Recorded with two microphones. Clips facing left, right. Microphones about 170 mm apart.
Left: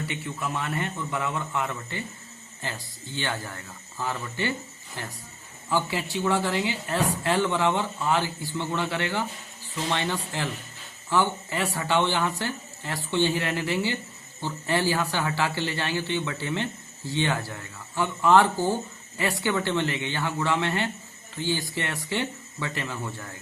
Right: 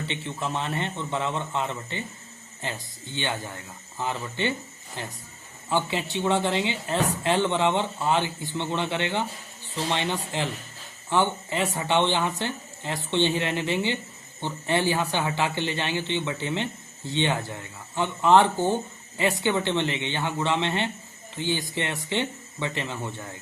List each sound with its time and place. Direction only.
0.0 s speech: 25° right (ahead or behind)